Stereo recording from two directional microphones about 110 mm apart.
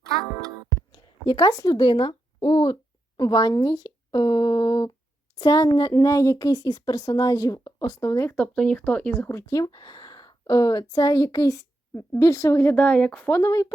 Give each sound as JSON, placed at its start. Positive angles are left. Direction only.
{"t": 0.9, "sound": "speech", "side_deg": 40}
{"t": 8.4, "sound": "speech", "side_deg": 10}
{"t": 9.5, "sound": "a woman's voice", "side_deg": 35}
{"t": 12.7, "sound": "speech", "side_deg": 15}